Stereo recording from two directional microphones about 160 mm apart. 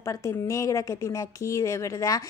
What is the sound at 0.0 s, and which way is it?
A woman's voice, 20° left (ahead or behind).